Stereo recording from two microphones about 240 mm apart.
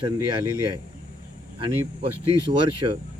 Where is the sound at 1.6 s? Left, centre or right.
Right.